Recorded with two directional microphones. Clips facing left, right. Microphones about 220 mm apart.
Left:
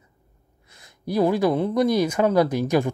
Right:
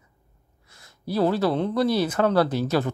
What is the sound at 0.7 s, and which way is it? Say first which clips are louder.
Speech: left 2 dB; 15° left (ahead or behind).